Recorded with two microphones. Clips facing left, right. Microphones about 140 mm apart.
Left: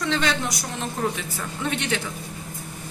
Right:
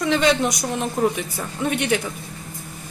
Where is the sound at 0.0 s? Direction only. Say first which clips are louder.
Right 6 dB; 15° right (ahead or behind).